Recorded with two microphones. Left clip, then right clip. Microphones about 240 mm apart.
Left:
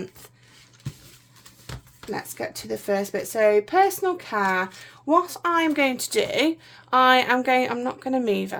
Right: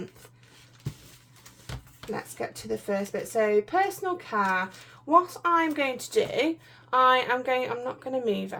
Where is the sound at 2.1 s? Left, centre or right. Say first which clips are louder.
Left 3 dB; left.